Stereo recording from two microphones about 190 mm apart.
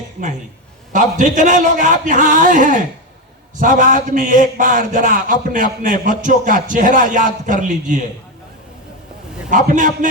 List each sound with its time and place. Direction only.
0.9 s a man's voice: 40° right (ahead or behind)
9.5 s a man's voice: 45° right (ahead or behind)